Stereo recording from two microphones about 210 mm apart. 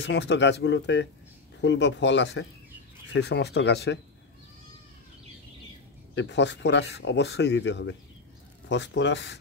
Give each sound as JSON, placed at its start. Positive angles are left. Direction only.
{"t": 0.0, "sound": "speech", "side_deg": 55}
{"t": 6.1, "sound": "speech", "side_deg": 55}